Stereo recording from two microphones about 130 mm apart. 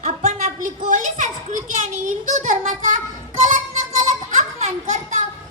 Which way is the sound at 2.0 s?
75° right (ahead or behind).